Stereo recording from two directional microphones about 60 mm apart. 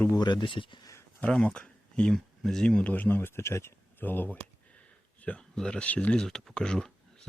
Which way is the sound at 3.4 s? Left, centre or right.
Left.